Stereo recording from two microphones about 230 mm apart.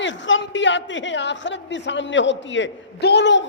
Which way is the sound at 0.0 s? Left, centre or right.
Left.